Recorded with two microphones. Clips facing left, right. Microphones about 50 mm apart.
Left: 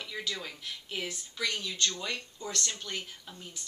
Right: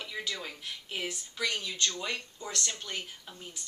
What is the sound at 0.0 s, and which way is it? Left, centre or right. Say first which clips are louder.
A woman's voice: even; centre.